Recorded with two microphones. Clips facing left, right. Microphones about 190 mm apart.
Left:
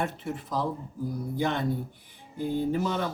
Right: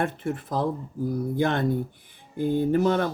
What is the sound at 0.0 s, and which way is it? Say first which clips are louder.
Speech: right 4 dB; 55° right (ahead or behind).